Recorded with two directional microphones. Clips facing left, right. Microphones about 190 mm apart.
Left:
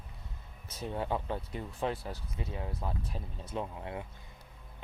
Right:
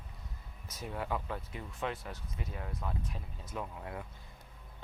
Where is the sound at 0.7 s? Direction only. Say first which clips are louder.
Left 3 dB; 30° left (ahead or behind).